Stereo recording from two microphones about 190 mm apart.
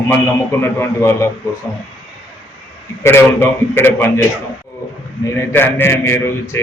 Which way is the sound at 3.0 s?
10° left (ahead or behind).